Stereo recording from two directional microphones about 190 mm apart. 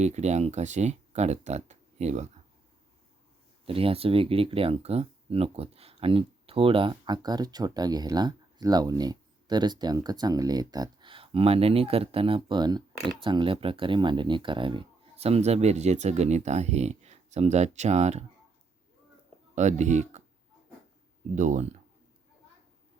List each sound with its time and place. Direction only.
0.0 s speech: 35° right (ahead or behind)
3.7 s speech: 30° right (ahead or behind)
19.5 s speech: 40° right (ahead or behind)
21.3 s speech: 40° right (ahead or behind)